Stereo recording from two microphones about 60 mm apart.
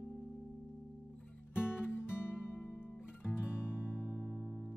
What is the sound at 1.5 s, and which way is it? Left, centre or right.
Music, left.